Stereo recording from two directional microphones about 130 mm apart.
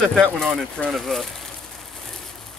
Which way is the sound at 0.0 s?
5° left (ahead or behind).